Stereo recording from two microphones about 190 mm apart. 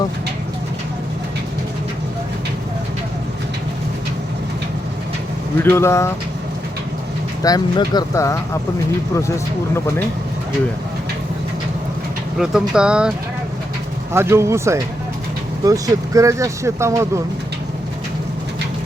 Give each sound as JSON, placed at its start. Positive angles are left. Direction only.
{"t": 5.6, "sound": "speech", "side_deg": 15}
{"t": 7.4, "sound": "speech", "side_deg": 20}
{"t": 12.4, "sound": "speech", "side_deg": -5}